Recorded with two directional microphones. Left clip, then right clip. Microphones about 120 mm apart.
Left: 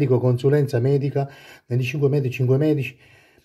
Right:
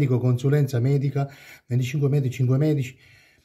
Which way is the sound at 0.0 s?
25° left (ahead or behind).